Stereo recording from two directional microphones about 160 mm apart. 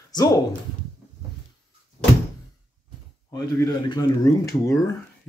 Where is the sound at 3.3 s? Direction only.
25° left (ahead or behind).